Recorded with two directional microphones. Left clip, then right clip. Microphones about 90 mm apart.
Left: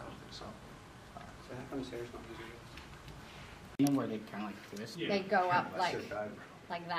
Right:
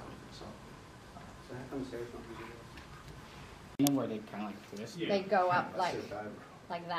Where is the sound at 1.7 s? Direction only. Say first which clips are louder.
Right 1 dB; 15° left (ahead or behind).